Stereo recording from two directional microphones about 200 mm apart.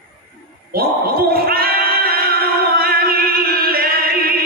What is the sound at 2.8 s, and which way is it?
Music, 50° right (ahead or behind).